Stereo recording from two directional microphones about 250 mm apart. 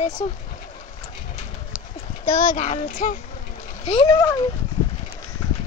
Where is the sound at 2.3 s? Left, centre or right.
Left.